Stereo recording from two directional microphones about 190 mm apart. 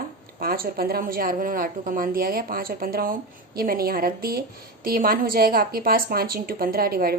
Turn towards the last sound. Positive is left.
turn(degrees=-50)  # may be behind; listen again after turning